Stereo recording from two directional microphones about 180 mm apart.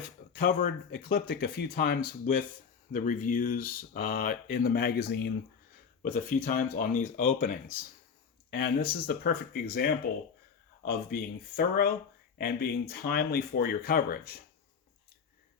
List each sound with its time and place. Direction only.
0.0 s speech: 55° left (ahead or behind)
6.0 s speech: 45° left (ahead or behind)